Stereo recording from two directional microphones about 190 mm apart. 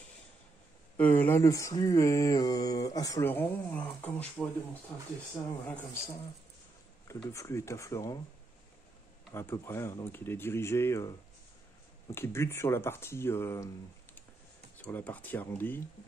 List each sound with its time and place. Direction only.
0.9 s speech: 10° left (ahead or behind)
7.2 s speech: 15° left (ahead or behind)
9.3 s speech: 15° left (ahead or behind)
14.8 s speech: 10° left (ahead or behind)